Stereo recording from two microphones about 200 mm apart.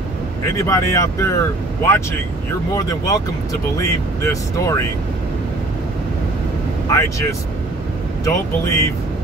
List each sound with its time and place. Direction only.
0.6 s speech: 15° left (ahead or behind)
2.7 s speech: 20° left (ahead or behind)
6.9 s speech: 15° left (ahead or behind)